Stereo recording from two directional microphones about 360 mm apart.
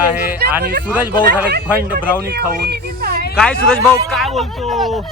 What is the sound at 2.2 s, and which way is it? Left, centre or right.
Speech, right.